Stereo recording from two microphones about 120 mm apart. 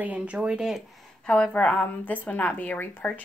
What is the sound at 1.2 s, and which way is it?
Speech, 10° left (ahead or behind).